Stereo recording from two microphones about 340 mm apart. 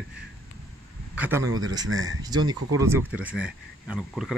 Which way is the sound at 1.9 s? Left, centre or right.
Right.